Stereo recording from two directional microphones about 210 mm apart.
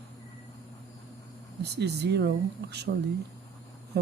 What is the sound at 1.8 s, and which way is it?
Speech, 50° right (ahead or behind).